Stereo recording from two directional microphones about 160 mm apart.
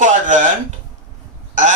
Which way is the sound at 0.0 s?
50° right (ahead or behind).